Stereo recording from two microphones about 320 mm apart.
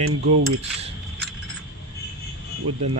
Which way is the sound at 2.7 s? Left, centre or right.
Centre.